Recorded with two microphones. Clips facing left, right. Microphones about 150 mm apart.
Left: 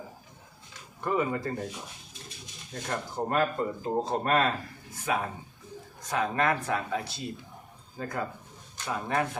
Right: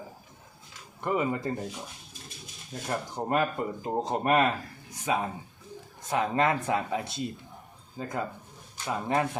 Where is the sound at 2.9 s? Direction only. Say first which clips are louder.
Right 1 dB; 15° right (ahead or behind).